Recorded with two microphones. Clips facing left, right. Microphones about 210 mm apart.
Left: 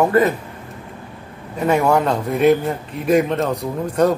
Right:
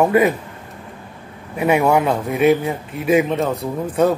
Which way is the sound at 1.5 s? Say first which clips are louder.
Right 1 dB; 10° right (ahead or behind).